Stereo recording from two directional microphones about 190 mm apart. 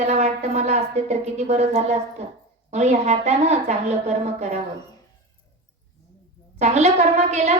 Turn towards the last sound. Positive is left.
turn(degrees=-35)  # may be behind; listen again after turning